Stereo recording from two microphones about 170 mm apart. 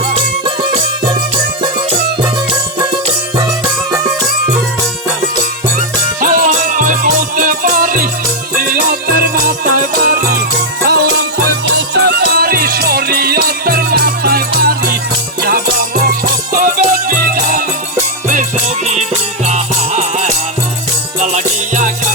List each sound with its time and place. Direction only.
0.1 s music: 30° right (ahead or behind)
2.5 s music: 25° right (ahead or behind)
6.1 s music: 55° right (ahead or behind)
11.8 s music: 75° right (ahead or behind); by 17.6 s 55° right (ahead or behind)
19.5 s music: 45° right (ahead or behind)